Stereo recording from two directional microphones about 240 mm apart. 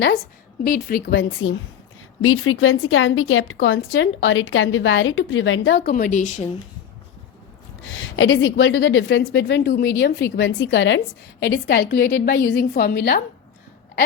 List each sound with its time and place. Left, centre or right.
0.6 s a woman's voice: left
5.9 s speech: left
7.9 s a woman's voice: left